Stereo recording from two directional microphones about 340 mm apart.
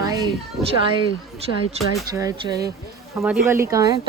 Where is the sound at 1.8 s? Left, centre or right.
Centre.